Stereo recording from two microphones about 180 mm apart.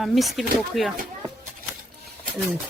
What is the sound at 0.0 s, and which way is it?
Speech, centre (ahead or behind).